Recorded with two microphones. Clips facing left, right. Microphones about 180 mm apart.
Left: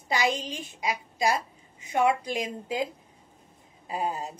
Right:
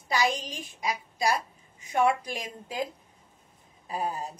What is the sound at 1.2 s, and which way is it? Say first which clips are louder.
A woman's voice: left 1 dB; 20° left (ahead or behind).